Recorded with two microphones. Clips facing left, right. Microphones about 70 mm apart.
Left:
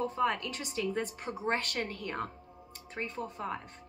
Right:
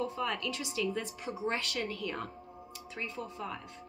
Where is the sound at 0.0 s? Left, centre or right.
Left.